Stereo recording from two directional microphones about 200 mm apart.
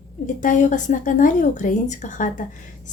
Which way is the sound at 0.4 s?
40° left (ahead or behind).